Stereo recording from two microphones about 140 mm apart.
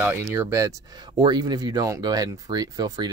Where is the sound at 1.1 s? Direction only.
30° right (ahead or behind).